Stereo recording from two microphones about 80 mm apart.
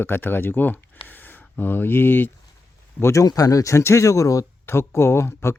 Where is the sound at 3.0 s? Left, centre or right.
Left.